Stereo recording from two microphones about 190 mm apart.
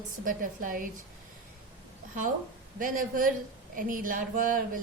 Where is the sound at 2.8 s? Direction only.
45° right (ahead or behind).